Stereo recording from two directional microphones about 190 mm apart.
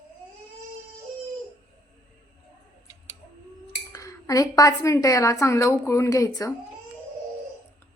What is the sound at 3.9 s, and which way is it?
A woman's voice, 15° left (ahead or behind).